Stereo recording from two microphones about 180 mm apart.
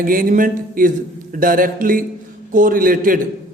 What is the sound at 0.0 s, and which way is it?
A man's voice, 50° right (ahead or behind).